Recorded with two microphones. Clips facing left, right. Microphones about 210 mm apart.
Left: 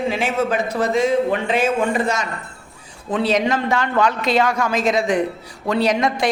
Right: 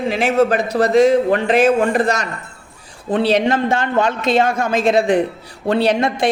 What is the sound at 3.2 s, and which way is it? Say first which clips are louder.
A woman's voice: right 3 dB; 30° right (ahead or behind).